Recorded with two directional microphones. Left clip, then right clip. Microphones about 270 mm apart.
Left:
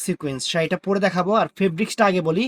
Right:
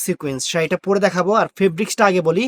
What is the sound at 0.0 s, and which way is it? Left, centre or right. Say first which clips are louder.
Speech: right 3 dB; right.